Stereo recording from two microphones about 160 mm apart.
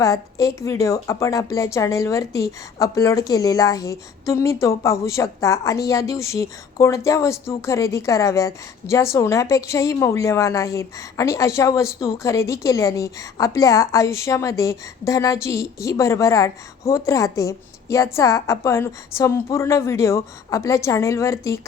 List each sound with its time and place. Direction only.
0.0 s a woman's voice: 20° left (ahead or behind)